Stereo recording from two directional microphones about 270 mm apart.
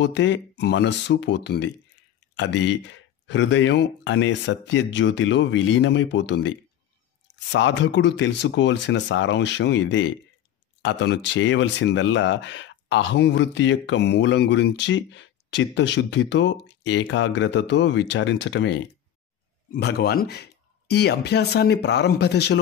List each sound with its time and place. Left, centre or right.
0.0 s speech: left